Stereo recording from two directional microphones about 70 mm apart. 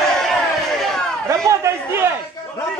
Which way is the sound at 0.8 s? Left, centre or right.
Centre.